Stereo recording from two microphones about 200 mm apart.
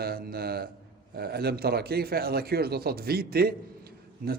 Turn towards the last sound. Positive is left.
turn(degrees=-50)  # may be behind; listen again after turning